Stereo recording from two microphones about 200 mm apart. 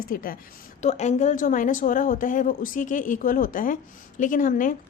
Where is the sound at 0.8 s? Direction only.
35° left (ahead or behind).